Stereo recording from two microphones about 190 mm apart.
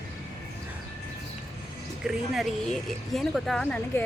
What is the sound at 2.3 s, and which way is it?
Speech, centre (ahead or behind).